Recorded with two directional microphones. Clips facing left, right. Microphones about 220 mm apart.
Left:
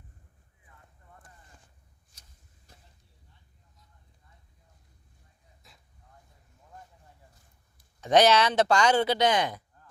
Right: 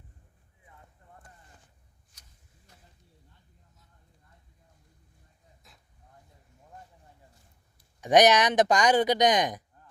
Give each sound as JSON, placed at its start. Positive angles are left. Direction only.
{"t": 8.0, "sound": "speech", "side_deg": -15}